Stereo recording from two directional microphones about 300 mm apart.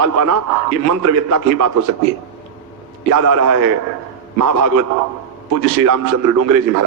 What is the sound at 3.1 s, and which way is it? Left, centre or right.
A man's voice, right.